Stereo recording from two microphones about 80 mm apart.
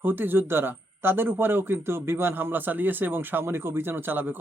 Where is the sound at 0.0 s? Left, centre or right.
Right.